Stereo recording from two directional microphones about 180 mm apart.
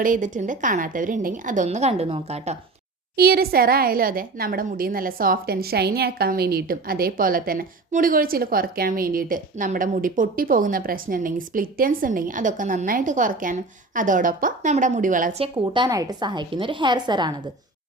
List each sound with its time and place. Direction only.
0.0 s a woman's voice: 45° right (ahead or behind)
3.2 s a woman's voice: 55° right (ahead or behind)
15.4 s a woman's voice: 30° right (ahead or behind)